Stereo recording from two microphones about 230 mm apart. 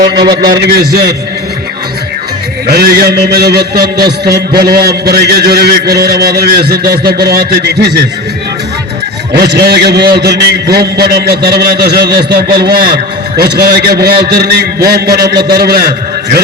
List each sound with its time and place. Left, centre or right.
0.6 s a man's voice: right
2.6 s a man's voice: right
9.3 s a man's voice: right